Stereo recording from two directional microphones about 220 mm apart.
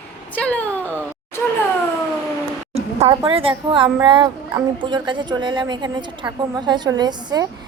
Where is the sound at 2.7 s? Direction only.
30° right (ahead or behind).